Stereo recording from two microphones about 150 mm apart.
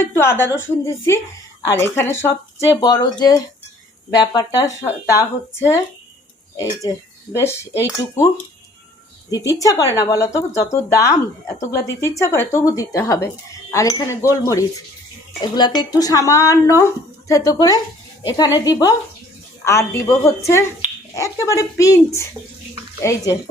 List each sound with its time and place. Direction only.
0.0 s a woman's voice: 15° left (ahead or behind)
2.8 s speech: 25° left (ahead or behind)
7.3 s a woman's voice: 15° left (ahead or behind)
9.3 s speech: 20° left (ahead or behind)